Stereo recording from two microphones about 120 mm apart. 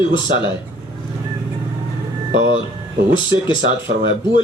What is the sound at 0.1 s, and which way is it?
Speech, 40° left (ahead or behind).